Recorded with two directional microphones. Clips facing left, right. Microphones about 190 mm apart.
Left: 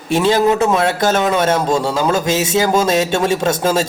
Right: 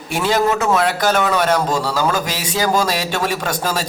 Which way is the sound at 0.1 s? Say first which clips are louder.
Left 4 dB; 25° left (ahead or behind).